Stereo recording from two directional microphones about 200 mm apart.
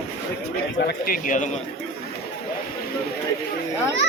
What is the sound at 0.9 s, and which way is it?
Speech, 45° left (ahead or behind).